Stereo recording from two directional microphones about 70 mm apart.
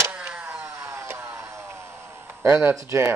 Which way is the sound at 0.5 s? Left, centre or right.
Right.